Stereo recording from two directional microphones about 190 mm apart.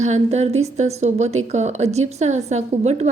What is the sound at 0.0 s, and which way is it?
A woman's voice, 35° right (ahead or behind).